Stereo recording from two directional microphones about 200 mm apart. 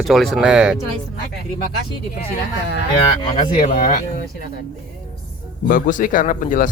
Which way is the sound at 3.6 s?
40° left (ahead or behind).